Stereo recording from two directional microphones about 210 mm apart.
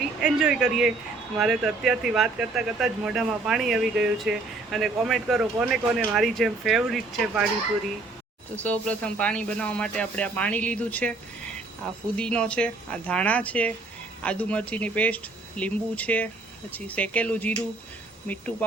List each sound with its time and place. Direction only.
0.2 s speech: 5° right (ahead or behind)
8.6 s speech: 5° left (ahead or behind)
12.1 s speech: 5° left (ahead or behind)